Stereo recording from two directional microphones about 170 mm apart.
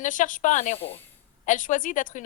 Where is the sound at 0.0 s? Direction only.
50° left (ahead or behind).